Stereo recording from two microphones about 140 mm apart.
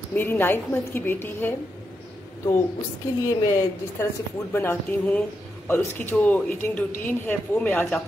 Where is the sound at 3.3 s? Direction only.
20° left (ahead or behind).